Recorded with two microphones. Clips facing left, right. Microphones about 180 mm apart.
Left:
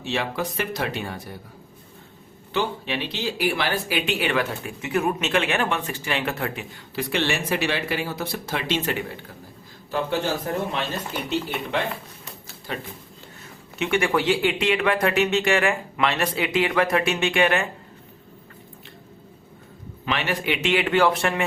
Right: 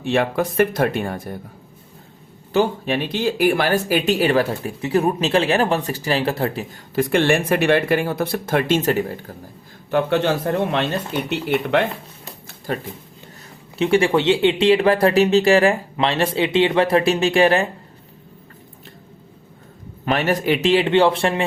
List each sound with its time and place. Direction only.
0.0 s speech: 55° right (ahead or behind)
2.5 s speech: 45° right (ahead or behind)
9.9 s a man's voice: 70° right (ahead or behind)
12.5 s a sound: 45° right (ahead or behind)
13.7 s speech: 30° right (ahead or behind)
20.1 s speech: 45° right (ahead or behind)